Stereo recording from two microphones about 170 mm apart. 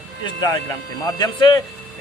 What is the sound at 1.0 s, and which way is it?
Speech, 25° left (ahead or behind).